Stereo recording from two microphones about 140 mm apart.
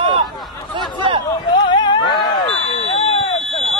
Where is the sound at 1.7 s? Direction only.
35° left (ahead or behind).